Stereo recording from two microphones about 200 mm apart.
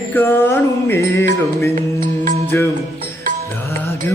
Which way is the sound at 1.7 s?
45° right (ahead or behind).